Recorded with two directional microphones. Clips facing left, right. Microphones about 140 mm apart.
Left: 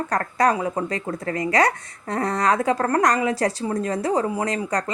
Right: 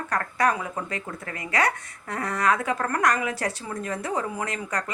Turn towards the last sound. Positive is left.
turn(degrees=35)  # may be behind; listen again after turning